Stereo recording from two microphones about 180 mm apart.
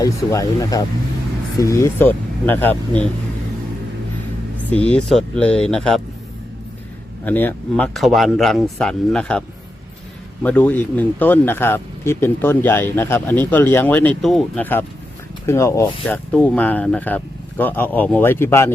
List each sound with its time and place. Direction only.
0.0 s speech: 20° left (ahead or behind)
4.5 s speech: 10° left (ahead or behind)
7.3 s speech: 10° left (ahead or behind)
10.4 s speech: 10° left (ahead or behind)